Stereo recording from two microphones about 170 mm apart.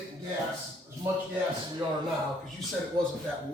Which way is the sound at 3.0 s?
30° right (ahead or behind).